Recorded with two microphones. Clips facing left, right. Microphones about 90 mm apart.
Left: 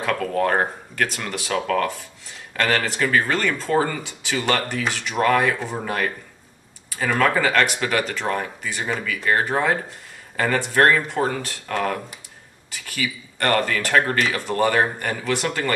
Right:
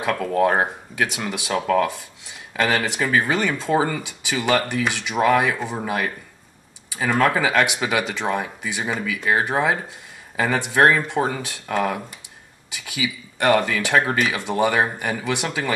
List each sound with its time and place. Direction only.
0.0 s speech: 10° right (ahead or behind)